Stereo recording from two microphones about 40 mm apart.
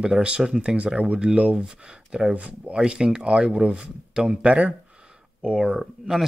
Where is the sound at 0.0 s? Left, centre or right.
Right.